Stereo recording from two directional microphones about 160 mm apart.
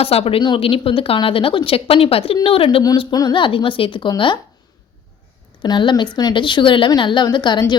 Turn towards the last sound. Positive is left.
turn(degrees=30)  # may be behind; listen again after turning